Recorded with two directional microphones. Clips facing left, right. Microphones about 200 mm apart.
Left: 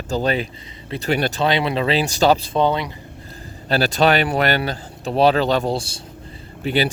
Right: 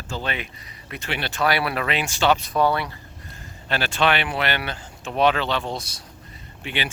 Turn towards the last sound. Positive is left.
turn(degrees=40)  # may be behind; listen again after turning